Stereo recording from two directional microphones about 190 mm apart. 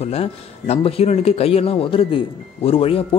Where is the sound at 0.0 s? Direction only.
30° left (ahead or behind).